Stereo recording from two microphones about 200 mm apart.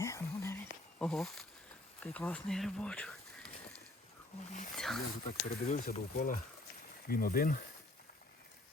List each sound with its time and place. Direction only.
0.0 s a sound: 15° left (ahead or behind)
2.0 s speech: 5° left (ahead or behind)
4.8 s speech: centre (ahead or behind)
5.6 s speech: 40° left (ahead or behind)